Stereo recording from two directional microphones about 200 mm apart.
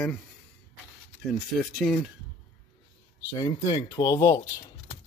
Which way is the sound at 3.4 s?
20° left (ahead or behind).